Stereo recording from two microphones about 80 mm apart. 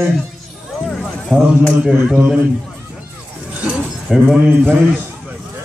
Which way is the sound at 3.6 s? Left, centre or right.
Centre.